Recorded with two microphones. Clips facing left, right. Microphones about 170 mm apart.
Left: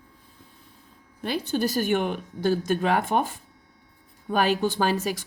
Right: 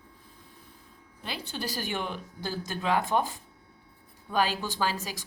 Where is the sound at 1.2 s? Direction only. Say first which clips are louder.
Left 10 dB; 50° left (ahead or behind).